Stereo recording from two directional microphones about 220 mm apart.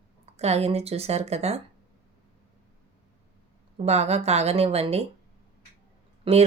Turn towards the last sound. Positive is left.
turn(degrees=-25)  # may be behind; listen again after turning